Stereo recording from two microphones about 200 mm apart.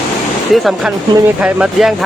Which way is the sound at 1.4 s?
5° right (ahead or behind).